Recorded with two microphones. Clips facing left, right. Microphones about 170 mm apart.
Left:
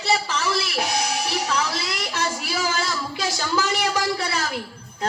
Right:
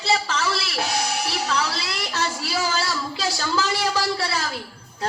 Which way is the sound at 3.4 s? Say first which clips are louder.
Left 1 dB; 20° left (ahead or behind).